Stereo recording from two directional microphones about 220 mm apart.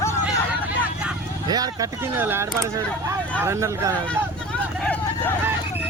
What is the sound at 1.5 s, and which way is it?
Speech, 15° right (ahead or behind).